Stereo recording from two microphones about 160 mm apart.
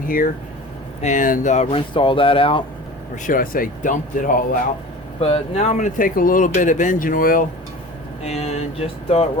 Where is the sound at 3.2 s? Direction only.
60° left (ahead or behind).